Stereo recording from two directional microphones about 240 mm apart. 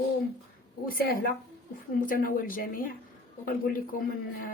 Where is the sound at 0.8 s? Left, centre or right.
Left.